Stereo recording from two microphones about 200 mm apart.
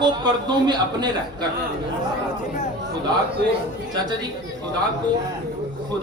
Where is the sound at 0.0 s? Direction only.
20° right (ahead or behind).